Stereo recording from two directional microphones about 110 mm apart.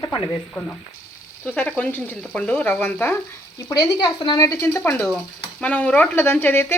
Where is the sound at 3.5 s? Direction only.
30° left (ahead or behind).